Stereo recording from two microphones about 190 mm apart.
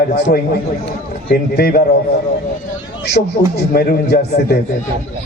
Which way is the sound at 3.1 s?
55° left (ahead or behind).